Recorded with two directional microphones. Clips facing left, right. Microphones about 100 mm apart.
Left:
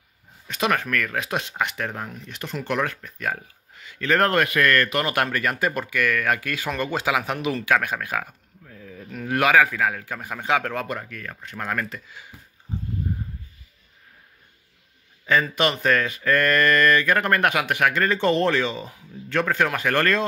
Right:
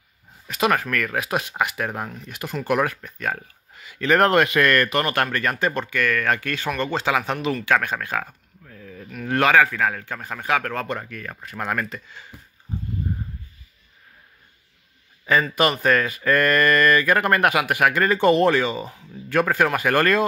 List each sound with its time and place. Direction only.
0.5 s speech: 5° right (ahead or behind)
3.8 s speech: 15° right (ahead or behind)
5.0 s a man's voice: 10° left (ahead or behind)
7.6 s a sound: 10° left (ahead or behind)
9.2 s a man's voice: 10° left (ahead or behind)
11.2 s speech: 10° right (ahead or behind)
15.5 s speech: 5° right (ahead or behind)